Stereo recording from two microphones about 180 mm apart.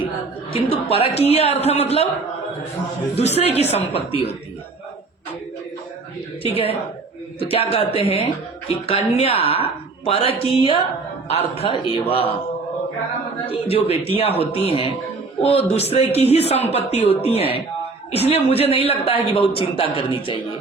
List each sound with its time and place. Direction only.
0.5 s a man's voice: 30° left (ahead or behind)
3.2 s a man's voice: 35° left (ahead or behind)
6.4 s a man's voice: 30° left (ahead or behind)
13.4 s a man's voice: 30° left (ahead or behind)